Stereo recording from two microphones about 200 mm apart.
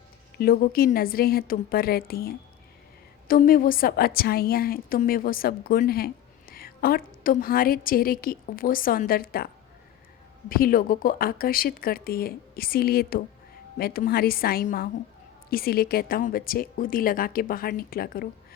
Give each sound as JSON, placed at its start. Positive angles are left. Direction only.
{"t": 0.3, "sound": "a woman's voice", "side_deg": 50}
{"t": 10.5, "sound": "a woman's voice", "side_deg": 45}